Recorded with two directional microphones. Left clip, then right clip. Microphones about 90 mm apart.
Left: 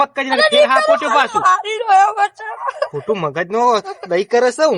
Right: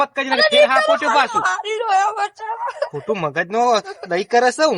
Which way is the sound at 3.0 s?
40° right (ahead or behind).